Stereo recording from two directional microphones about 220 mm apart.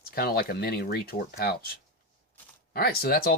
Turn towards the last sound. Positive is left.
turn(degrees=45)  # may be behind; listen again after turning